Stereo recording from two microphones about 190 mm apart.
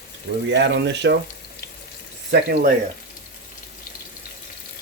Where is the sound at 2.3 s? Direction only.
60° right (ahead or behind).